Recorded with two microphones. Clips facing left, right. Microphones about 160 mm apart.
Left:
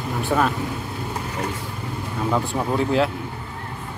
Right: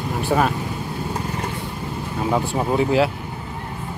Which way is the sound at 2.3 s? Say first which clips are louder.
Right 2 dB; 20° right (ahead or behind).